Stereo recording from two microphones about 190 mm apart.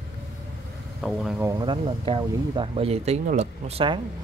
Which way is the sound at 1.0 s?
Centre (ahead or behind).